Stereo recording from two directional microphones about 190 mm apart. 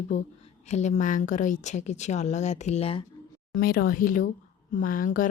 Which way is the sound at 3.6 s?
50° left (ahead or behind).